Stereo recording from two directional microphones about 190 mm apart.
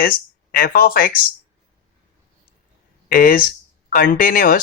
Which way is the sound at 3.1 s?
50° left (ahead or behind).